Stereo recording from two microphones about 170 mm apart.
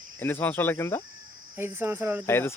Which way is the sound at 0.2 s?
10° left (ahead or behind).